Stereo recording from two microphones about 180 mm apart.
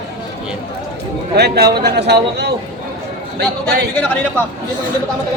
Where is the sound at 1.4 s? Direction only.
65° right (ahead or behind).